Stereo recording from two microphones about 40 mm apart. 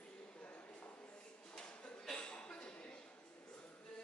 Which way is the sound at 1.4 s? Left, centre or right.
Left.